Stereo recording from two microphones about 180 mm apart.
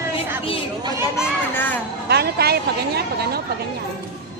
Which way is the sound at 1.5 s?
10° left (ahead or behind).